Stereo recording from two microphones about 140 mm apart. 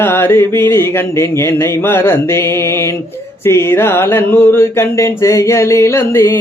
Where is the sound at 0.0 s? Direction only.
15° left (ahead or behind).